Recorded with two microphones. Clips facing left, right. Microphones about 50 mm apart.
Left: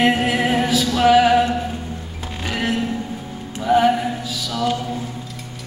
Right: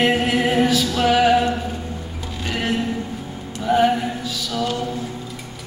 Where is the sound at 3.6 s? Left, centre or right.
Centre.